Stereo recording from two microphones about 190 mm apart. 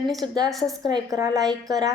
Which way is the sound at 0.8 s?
20° right (ahead or behind).